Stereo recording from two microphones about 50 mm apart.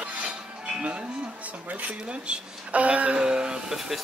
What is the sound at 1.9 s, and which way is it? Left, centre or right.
Speech, right.